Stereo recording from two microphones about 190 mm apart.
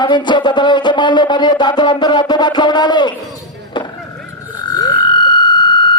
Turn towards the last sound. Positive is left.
turn(degrees=25)  # may be behind; listen again after turning